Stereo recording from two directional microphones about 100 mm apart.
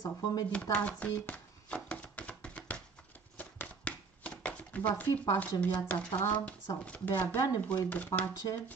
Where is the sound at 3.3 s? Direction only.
15° left (ahead or behind).